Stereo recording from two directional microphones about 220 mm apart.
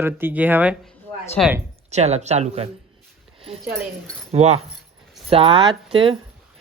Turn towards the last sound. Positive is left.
turn(degrees=-25)  # may be behind; listen again after turning